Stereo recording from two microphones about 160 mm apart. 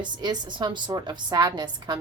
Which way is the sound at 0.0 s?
25° right (ahead or behind).